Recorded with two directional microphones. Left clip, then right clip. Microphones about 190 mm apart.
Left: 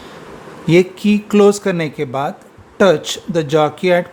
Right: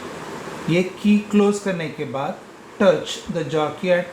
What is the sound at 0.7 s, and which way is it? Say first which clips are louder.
Speech: left 7 dB; 50° left (ahead or behind).